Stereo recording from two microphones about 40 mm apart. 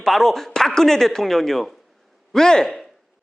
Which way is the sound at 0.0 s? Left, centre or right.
Centre.